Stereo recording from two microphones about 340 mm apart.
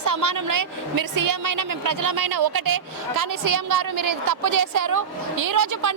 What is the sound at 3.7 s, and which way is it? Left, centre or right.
A woman's voice, right.